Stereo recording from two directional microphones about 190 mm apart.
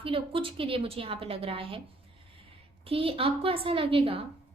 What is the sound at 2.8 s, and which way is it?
A woman's voice, 30° right (ahead or behind).